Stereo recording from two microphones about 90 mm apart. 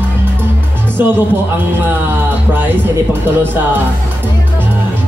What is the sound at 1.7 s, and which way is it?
Speech, 25° right (ahead or behind).